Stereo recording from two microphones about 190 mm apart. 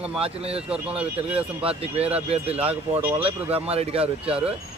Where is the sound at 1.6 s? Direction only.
30° right (ahead or behind).